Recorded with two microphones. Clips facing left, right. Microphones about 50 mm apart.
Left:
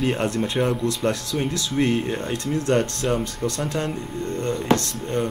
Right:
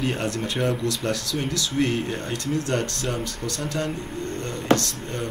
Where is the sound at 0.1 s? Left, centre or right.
Left.